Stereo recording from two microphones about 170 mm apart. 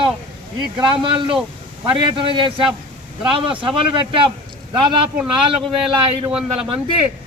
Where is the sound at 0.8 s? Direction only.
30° right (ahead or behind).